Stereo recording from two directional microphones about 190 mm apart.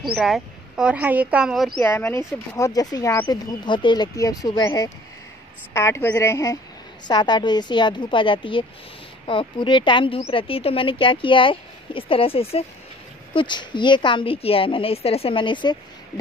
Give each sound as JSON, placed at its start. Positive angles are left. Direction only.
{"t": 0.1, "sound": "speech", "side_deg": 0}
{"t": 1.8, "sound": "a woman's voice", "side_deg": 10}